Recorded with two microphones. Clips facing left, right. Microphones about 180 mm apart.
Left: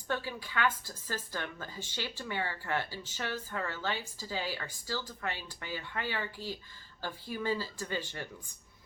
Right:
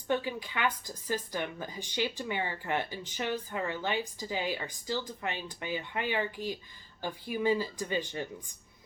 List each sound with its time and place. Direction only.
0.1 s a woman's voice: 20° right (ahead or behind)